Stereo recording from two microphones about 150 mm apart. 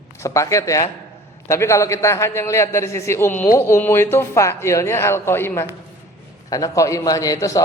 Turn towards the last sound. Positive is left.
turn(degrees=25)  # may be behind; listen again after turning